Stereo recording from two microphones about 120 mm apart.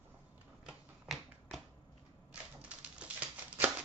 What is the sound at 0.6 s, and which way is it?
Typewriter, centre (ahead or behind).